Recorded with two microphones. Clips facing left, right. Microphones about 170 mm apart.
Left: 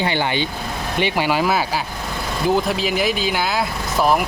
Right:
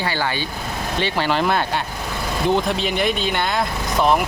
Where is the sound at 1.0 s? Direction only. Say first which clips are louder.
Left 2 dB; 10° left (ahead or behind).